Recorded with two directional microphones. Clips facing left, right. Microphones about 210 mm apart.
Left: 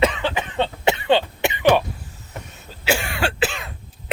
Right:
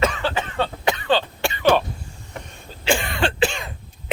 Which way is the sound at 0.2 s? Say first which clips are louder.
Left 1 dB; 15° left (ahead or behind).